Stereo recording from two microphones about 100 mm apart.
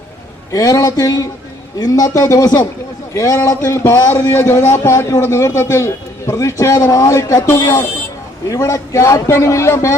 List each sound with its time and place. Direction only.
0.5 s a man's voice: 35° left (ahead or behind)